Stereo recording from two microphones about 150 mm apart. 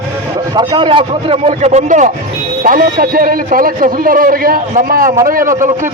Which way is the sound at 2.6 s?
75° right (ahead or behind).